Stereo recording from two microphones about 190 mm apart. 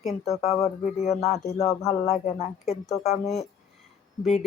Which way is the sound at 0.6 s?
35° left (ahead or behind).